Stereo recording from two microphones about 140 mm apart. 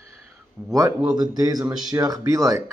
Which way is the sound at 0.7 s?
25° right (ahead or behind).